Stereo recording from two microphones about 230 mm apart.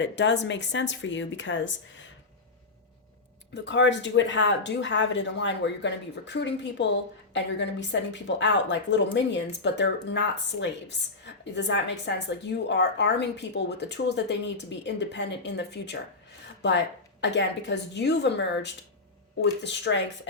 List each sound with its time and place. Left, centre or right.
0.0 s speech: left
3.5 s speech: left